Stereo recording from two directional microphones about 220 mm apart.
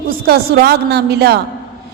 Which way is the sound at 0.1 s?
45° right (ahead or behind).